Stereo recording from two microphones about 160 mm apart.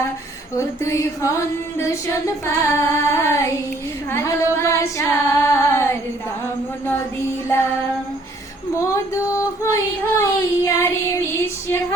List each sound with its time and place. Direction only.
0.5 s female singing: 15° left (ahead or behind)
9.1 s music: 20° left (ahead or behind)